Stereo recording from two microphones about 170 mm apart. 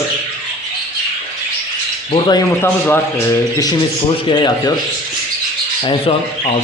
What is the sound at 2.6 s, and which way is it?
Speech, 15° left (ahead or behind).